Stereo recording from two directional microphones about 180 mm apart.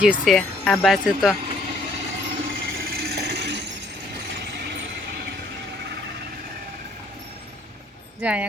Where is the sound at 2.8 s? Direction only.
60° right (ahead or behind).